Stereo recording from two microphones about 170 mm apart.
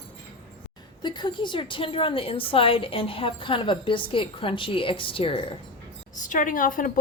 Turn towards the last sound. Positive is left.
turn(degrees=50)  # may be behind; listen again after turning